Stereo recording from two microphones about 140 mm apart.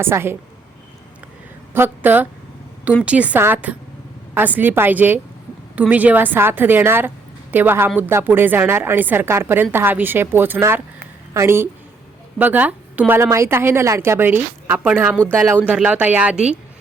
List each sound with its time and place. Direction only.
0.0 s a woman's voice: 15° right (ahead or behind)
1.7 s a woman's voice: 15° right (ahead or behind)